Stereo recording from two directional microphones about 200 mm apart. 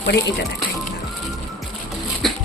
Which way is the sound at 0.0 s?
60° left (ahead or behind).